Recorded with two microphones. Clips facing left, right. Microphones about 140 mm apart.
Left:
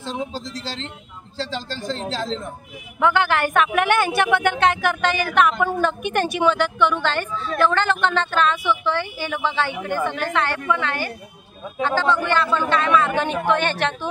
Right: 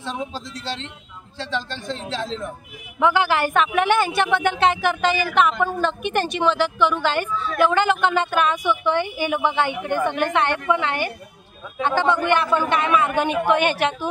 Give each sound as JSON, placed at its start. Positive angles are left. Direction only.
{"t": 1.8, "sound": "speech", "side_deg": 35}
{"t": 3.0, "sound": "a woman's voice", "side_deg": -5}